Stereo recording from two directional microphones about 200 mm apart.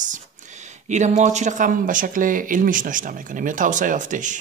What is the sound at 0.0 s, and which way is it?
Speech, 40° right (ahead or behind).